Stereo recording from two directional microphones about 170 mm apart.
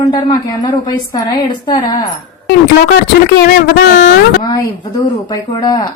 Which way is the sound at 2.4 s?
75° left (ahead or behind).